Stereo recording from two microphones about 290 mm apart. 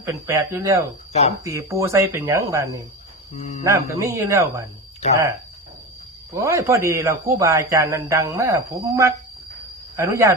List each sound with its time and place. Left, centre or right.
0.0 s a man's voice: centre
3.3 s speech: left
3.6 s a man's voice: centre
6.3 s a man's voice: centre